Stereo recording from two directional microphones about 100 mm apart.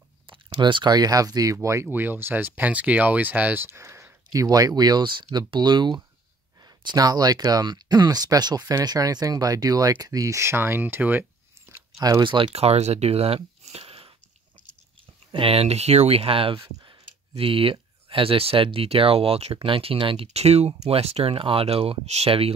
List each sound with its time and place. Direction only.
0.3 s speech: 55° right (ahead or behind); by 1.9 s 30° right (ahead or behind)
1.9 s speech: 20° right (ahead or behind)
12.2 s speech: 55° right (ahead or behind)
12.5 s speech: 90° right; by 14.1 s 75° right (ahead or behind)
15.3 s speech: 70° right (ahead or behind)